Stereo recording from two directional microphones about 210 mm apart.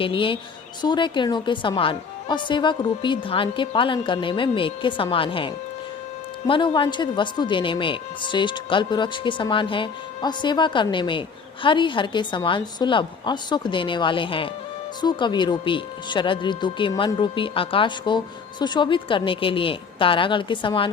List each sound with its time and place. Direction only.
0.0 s a woman's voice: 25° left (ahead or behind)
6.5 s a woman's voice: 25° left (ahead or behind)